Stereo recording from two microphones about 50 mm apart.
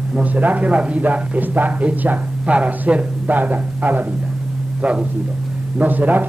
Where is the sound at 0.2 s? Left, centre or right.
Right.